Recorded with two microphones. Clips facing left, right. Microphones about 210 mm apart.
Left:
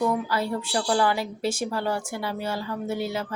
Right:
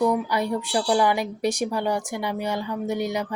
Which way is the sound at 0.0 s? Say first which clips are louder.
Right 3 dB; 15° right (ahead or behind).